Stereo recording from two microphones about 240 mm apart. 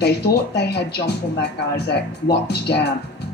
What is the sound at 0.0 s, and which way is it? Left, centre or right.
Speech, left.